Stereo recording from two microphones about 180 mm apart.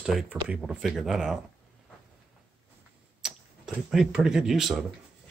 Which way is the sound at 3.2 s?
5° right (ahead or behind).